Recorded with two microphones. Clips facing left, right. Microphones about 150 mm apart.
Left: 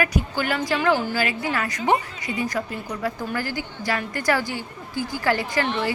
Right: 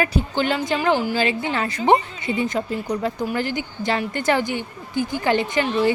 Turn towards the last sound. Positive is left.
turn(degrees=-20)  # may be behind; listen again after turning